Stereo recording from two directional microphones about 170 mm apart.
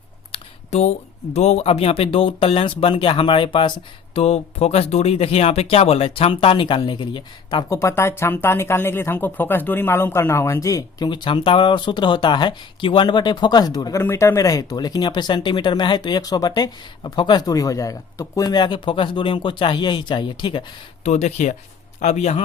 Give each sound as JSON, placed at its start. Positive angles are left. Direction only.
{"t": 0.3, "sound": "speech", "side_deg": 40}
{"t": 7.8, "sound": "speech", "side_deg": 15}
{"t": 21.0, "sound": "speech", "side_deg": 40}